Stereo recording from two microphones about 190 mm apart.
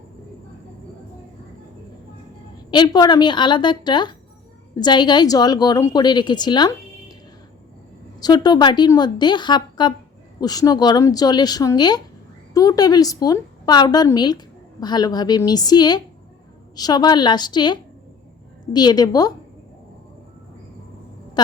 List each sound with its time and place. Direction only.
2.6 s a woman's voice: 25° left (ahead or behind)
8.2 s a woman's voice: 20° left (ahead or behind)
21.4 s a woman's voice: 20° left (ahead or behind)